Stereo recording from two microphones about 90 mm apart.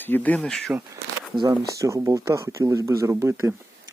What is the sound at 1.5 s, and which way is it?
Speech, 35° right (ahead or behind).